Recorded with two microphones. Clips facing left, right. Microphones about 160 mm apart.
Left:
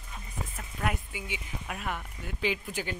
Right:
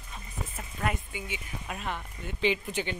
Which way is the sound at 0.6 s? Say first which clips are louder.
Right 1 dB; centre (ahead or behind).